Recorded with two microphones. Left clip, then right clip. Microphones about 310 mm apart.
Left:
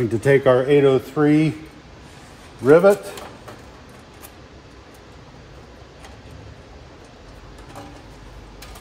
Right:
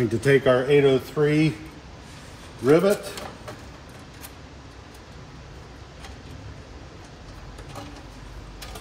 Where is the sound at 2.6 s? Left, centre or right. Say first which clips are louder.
Left 6 dB; left.